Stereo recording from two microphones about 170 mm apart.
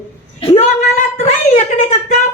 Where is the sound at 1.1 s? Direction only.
40° left (ahead or behind).